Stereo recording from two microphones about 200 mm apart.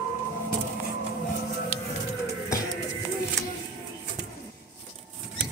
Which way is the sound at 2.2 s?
15° left (ahead or behind).